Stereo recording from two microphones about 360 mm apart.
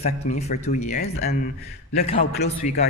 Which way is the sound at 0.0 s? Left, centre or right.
Centre.